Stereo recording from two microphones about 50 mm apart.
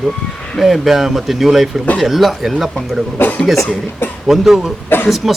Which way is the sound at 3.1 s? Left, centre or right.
Left.